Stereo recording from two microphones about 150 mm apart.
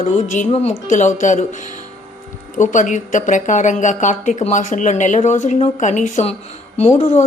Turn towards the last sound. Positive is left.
turn(degrees=55)  # may be behind; listen again after turning